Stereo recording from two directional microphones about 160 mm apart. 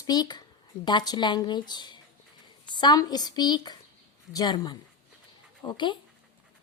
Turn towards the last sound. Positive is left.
turn(degrees=30)  # may be behind; listen again after turning